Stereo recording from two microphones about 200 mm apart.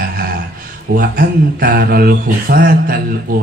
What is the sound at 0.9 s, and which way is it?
Mantra, 45° right (ahead or behind).